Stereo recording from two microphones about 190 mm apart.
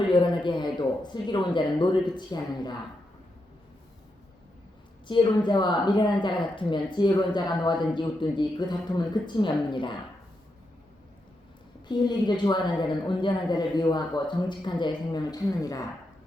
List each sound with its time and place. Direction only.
0.0 s a woman's voice: 25° left (ahead or behind)
5.0 s a woman's voice: 25° left (ahead or behind)
11.9 s a woman's voice: 25° left (ahead or behind)